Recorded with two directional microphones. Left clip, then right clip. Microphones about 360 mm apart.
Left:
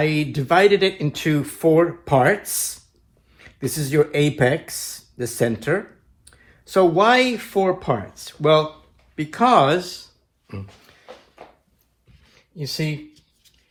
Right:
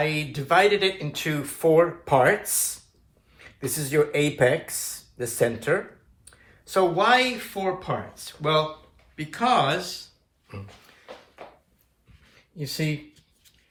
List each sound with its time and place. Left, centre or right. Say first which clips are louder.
0.0 s speech: left 5 dB; left
12.5 s speech: left 4 dB; centre